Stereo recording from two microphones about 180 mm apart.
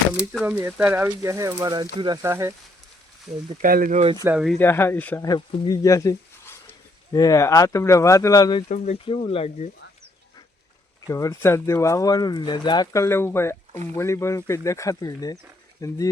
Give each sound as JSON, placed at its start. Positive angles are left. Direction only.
{"t": 0.2, "sound": "speech", "side_deg": -5}
{"t": 3.3, "sound": "speech", "side_deg": -35}
{"t": 3.6, "sound": "speech", "side_deg": -50}
{"t": 4.4, "sound": "speech", "side_deg": 0}
{"t": 4.6, "sound": "speech", "side_deg": 15}
{"t": 5.2, "sound": "speech", "side_deg": 20}
{"t": 8.7, "sound": "speech", "side_deg": 40}
{"t": 11.0, "sound": "speech", "side_deg": 20}